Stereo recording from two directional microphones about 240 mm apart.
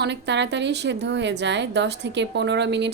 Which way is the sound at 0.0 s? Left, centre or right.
Right.